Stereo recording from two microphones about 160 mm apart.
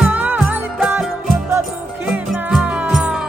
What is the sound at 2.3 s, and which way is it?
Music, 5° right (ahead or behind).